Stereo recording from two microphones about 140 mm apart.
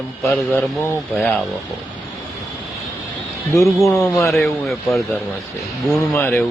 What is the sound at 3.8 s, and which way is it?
Speech, 20° left (ahead or behind).